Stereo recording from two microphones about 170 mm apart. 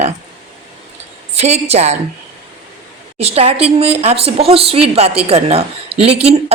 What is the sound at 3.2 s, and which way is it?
Speech, 35° right (ahead or behind).